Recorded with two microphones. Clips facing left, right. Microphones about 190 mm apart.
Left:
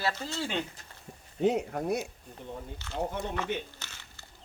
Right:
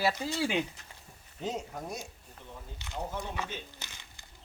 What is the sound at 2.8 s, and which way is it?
Speech, 15° right (ahead or behind).